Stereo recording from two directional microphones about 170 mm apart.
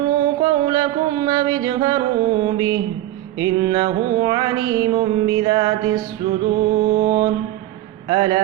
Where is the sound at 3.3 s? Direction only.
25° right (ahead or behind).